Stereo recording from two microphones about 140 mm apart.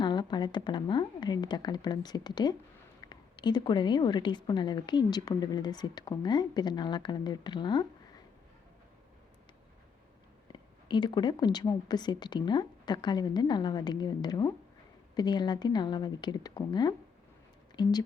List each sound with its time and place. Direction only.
0.0 s a woman's voice: 30° left (ahead or behind)
10.5 s a woman's voice: 35° left (ahead or behind)